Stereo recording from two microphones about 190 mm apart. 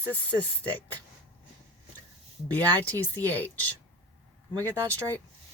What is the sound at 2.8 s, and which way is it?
Speech, 10° left (ahead or behind).